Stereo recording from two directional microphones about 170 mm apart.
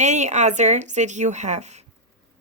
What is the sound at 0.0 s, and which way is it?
A woman's voice, 45° right (ahead or behind).